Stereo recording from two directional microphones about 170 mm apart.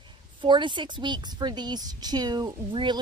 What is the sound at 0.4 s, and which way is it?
A woman's voice, 30° right (ahead or behind).